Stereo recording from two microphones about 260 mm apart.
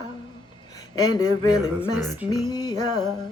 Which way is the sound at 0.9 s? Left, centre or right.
Centre.